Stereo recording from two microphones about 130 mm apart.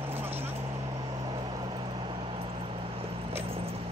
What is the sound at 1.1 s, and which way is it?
Vehicle, 35° right (ahead or behind).